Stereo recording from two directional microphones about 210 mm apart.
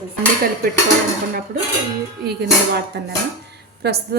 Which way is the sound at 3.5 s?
50° right (ahead or behind).